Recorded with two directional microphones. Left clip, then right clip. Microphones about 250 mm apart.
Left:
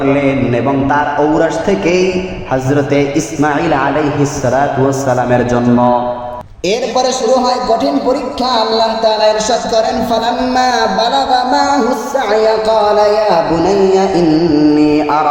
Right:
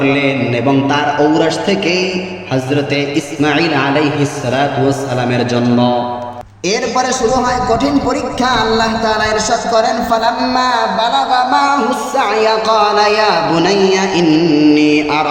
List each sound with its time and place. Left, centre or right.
3.4 s a man's voice: centre
6.9 s music: right
9.2 s speech: centre
10.1 s music: right
12.1 s a man's voice: centre